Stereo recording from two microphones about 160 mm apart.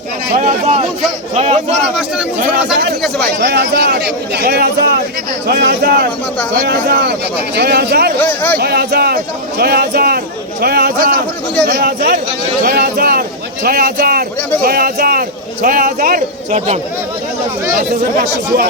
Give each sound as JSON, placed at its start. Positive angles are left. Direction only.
{"t": 0.3, "sound": "a man's voice", "side_deg": -45}
{"t": 3.4, "sound": "speech", "side_deg": -90}
{"t": 8.2, "sound": "speech", "side_deg": 10}
{"t": 8.5, "sound": "a man's voice", "side_deg": -80}